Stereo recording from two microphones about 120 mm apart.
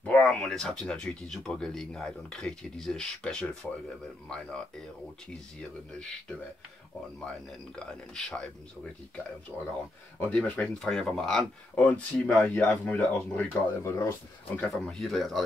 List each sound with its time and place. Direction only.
0.0 s speech: 10° left (ahead or behind)
7.7 s speech: 5° left (ahead or behind)
10.3 s speech: 10° left (ahead or behind)
14.7 s speech: centre (ahead or behind)